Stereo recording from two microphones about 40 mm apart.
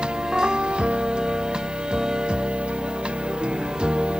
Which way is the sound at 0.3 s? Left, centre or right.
Right.